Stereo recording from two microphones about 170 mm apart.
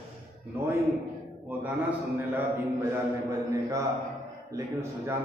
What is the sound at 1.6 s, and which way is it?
A man's voice, 10° right (ahead or behind).